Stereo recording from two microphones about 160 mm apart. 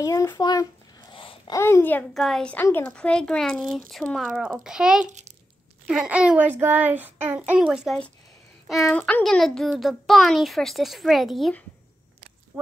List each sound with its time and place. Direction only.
0.0 s speech: 20° left (ahead or behind)
1.1 s babbling: 35° left (ahead or behind)
1.5 s a child's voice: 15° left (ahead or behind); by 5.0 s 5° right (ahead or behind)
5.0 s a child's voice: 45° right (ahead or behind)
5.9 s a child's voice: 5° right (ahead or behind)
8.8 s a child's voice: 10° left (ahead or behind)